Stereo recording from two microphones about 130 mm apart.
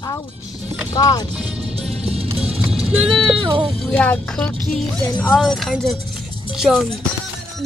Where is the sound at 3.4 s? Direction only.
40° right (ahead or behind).